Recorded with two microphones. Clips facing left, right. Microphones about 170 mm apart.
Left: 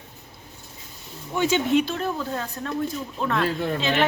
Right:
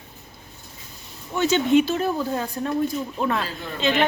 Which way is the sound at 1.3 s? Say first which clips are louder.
Right 2 dB; 10° left (ahead or behind).